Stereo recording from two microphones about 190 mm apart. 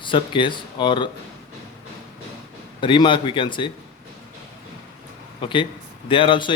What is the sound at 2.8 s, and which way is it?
Speech, 25° left (ahead or behind).